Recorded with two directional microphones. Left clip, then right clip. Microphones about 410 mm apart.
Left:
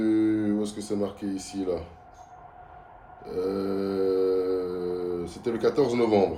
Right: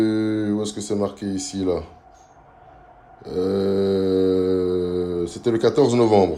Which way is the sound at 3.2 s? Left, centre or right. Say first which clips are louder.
Right 7 dB; centre.